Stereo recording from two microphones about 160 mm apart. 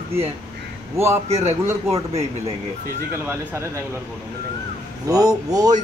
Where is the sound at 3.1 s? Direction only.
15° right (ahead or behind).